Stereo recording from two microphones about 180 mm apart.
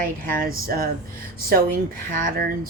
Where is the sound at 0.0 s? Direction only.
55° right (ahead or behind).